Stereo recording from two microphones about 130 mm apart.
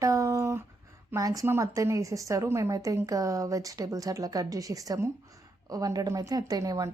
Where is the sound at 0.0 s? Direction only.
25° right (ahead or behind).